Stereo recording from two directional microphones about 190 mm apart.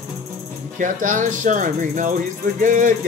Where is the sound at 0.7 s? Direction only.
45° right (ahead or behind).